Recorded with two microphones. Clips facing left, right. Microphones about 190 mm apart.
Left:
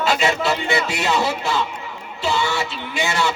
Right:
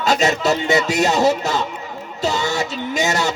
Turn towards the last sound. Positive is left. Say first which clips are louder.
# right 3 dB
turn(degrees=-40)  # may be behind; listen again after turning